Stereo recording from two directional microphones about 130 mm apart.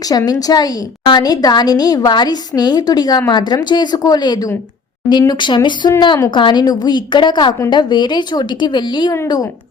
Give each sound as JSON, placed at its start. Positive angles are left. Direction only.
{"t": 0.1, "sound": "a woman's voice", "side_deg": 30}